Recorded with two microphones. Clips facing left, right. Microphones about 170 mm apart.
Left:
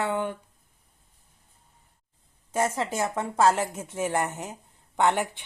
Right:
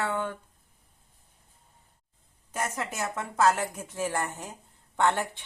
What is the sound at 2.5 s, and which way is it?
A woman's voice, 30° left (ahead or behind).